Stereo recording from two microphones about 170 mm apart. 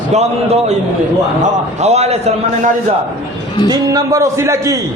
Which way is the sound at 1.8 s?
40° right (ahead or behind).